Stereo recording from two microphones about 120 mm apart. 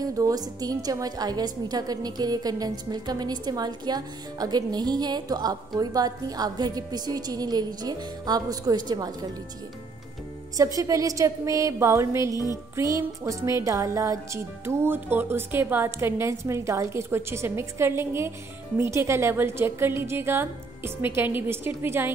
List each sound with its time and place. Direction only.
0.0 s a woman's voice: 30° right (ahead or behind)
10.6 s speech: 30° right (ahead or behind)